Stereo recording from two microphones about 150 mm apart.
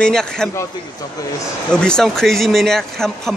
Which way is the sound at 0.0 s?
5° left (ahead or behind).